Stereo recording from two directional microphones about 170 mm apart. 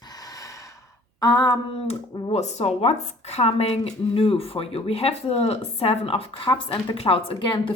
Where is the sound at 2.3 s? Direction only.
40° left (ahead or behind).